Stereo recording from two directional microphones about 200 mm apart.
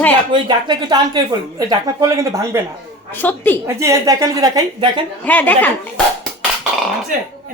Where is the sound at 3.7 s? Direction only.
15° right (ahead or behind).